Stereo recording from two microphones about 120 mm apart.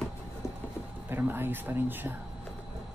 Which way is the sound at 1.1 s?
15° right (ahead or behind).